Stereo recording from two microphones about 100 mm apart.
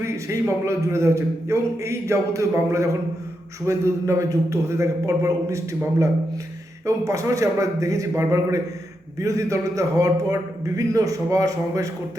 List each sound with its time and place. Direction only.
0.0 s a man's voice: 30° right (ahead or behind)